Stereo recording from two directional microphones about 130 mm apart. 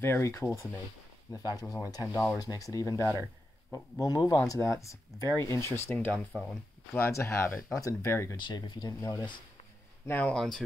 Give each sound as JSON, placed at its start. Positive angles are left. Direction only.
{"t": 0.0, "sound": "speech", "side_deg": 20}
{"t": 6.3, "sound": "speech", "side_deg": 5}
{"t": 6.9, "sound": "speech", "side_deg": 20}
{"t": 8.4, "sound": "speech", "side_deg": 35}
{"t": 10.0, "sound": "speech", "side_deg": 10}